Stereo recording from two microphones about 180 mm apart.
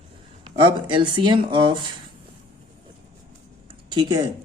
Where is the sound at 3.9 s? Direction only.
25° right (ahead or behind).